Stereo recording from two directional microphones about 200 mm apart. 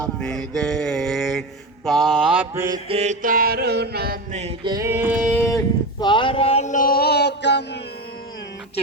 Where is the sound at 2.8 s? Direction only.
30° right (ahead or behind); by 4.2 s 50° right (ahead or behind).